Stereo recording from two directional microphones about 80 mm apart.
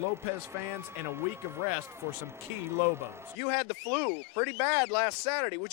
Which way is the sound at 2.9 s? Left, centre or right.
Right.